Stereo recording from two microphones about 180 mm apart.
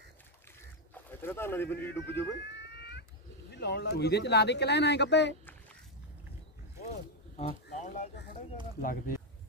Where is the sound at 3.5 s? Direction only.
65° left (ahead or behind).